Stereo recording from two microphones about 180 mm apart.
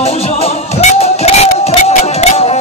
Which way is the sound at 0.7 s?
35° left (ahead or behind).